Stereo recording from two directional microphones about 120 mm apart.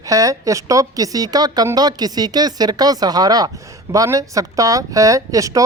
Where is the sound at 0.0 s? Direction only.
30° right (ahead or behind).